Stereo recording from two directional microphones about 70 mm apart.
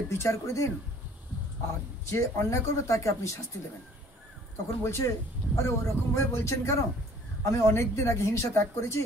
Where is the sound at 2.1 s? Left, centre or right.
Left.